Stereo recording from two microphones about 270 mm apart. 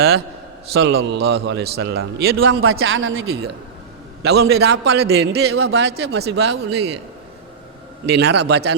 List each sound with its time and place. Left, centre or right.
0.7 s a man's voice: right
2.5 s a man's voice: right
8.0 s a man's voice: right